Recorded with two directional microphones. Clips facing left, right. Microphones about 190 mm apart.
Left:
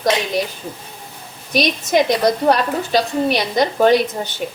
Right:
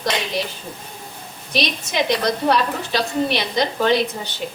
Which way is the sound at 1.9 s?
50° left (ahead or behind).